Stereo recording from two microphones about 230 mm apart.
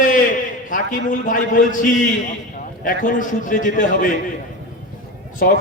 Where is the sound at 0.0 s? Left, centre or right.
Left.